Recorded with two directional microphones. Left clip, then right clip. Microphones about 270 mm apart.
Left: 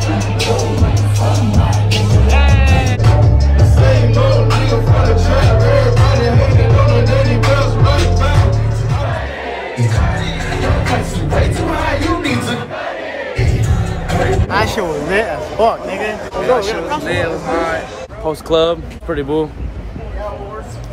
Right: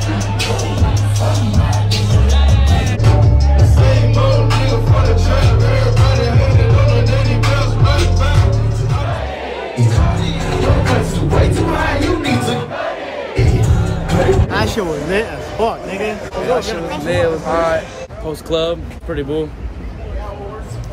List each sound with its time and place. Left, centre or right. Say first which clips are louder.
0.4 s music: left 4 dB; centre
2.0 s music: left 4 dB; centre
9.8 s music: even; centre
17.0 s speech: right 2 dB; centre
18.5 s speech: left 4 dB; centre